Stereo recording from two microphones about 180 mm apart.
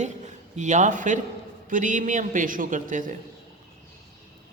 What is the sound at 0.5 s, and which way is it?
A man's voice, 40° right (ahead or behind).